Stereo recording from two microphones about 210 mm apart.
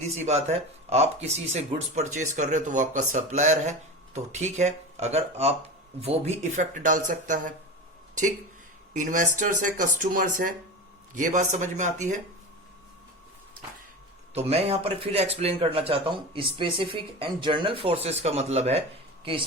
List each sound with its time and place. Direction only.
0.2 s speech: 30° right (ahead or behind)
8.9 s speech: 35° right (ahead or behind)
14.3 s speech: 30° right (ahead or behind)